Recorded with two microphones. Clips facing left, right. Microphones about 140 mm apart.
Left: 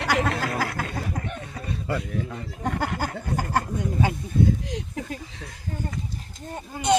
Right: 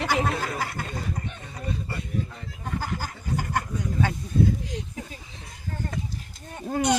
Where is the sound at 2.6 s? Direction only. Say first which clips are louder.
Left 5 dB; 65° left (ahead or behind).